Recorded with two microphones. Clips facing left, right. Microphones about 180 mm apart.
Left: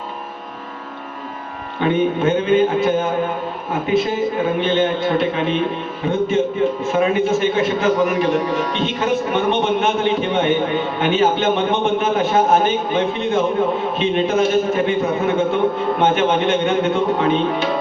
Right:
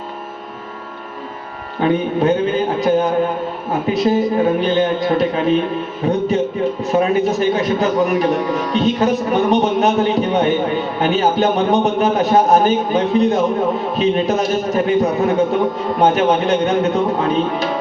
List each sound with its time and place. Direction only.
1.8 s a man's voice: 40° right (ahead or behind)